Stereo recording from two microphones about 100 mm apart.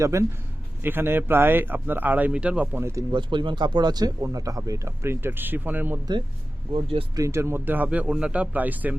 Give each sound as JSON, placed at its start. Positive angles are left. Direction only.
{"t": 0.0, "sound": "speech", "side_deg": -30}
{"t": 3.1, "sound": "speech", "side_deg": -50}
{"t": 6.7, "sound": "speech", "side_deg": -70}
{"t": 7.2, "sound": "speech", "side_deg": -30}